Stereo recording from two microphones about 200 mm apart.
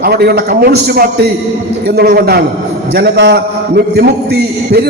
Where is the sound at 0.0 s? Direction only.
50° right (ahead or behind).